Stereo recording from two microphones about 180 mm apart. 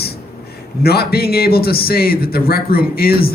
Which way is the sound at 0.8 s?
60° left (ahead or behind).